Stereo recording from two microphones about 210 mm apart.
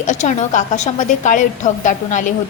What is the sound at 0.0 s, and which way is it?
A woman's voice, 35° left (ahead or behind).